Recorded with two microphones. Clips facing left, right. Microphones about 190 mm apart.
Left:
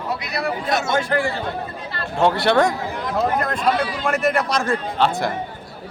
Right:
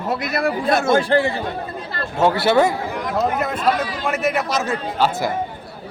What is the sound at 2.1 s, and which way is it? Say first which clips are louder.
A man's voice: right 1 dB; 5° right (ahead or behind).